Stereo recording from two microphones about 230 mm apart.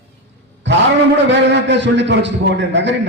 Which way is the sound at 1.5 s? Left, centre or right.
Right.